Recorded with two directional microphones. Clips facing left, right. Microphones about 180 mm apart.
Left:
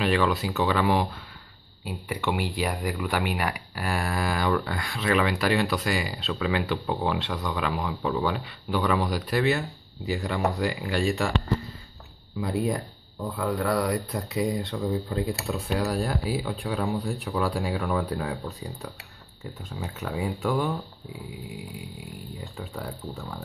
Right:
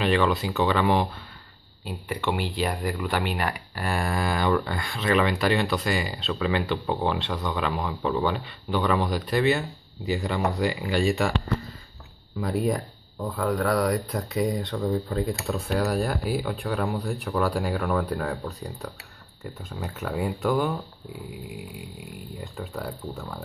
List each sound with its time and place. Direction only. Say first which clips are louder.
0.0 s speech: right 1 dB; 5° left (ahead or behind)
2.1 s speech: right 1 dB; 10° left (ahead or behind)
12.4 s speech: right 1 dB; centre (ahead or behind)
22.4 s speech: right 3 dB; centre (ahead or behind)